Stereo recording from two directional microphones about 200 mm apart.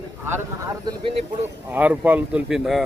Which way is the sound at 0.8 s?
20° right (ahead or behind).